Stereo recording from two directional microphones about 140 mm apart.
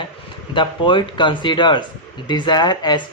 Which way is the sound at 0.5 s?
35° left (ahead or behind).